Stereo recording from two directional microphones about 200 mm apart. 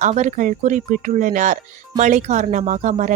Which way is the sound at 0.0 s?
35° right (ahead or behind).